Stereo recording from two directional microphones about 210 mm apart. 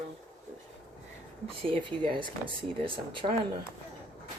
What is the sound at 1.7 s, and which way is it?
Speech, 25° right (ahead or behind).